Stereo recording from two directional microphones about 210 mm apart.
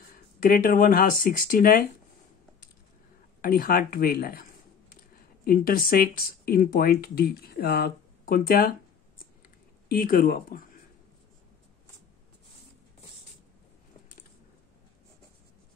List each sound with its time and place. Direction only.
0.5 s speech: 40° left (ahead or behind)
3.3 s speech: 45° left (ahead or behind)
9.8 s speech: 40° left (ahead or behind)